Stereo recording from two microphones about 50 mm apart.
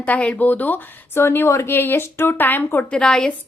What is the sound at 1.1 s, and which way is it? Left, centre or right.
Speech, left.